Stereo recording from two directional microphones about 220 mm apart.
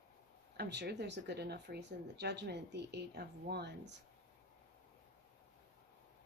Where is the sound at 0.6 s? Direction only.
50° right (ahead or behind).